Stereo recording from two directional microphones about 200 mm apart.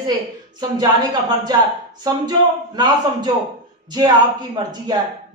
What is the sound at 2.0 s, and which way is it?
A man's voice, 20° right (ahead or behind).